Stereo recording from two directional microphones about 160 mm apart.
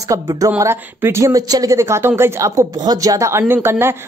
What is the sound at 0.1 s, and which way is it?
Speech, 20° right (ahead or behind).